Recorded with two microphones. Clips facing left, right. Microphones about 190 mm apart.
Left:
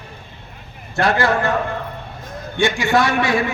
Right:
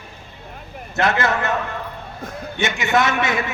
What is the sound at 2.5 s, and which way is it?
Speech, 20° right (ahead or behind).